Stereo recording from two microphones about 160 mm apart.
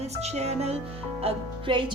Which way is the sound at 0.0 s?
40° right (ahead or behind).